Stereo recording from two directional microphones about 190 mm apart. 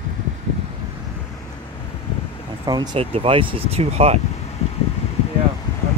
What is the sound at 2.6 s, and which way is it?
Speech, 20° right (ahead or behind).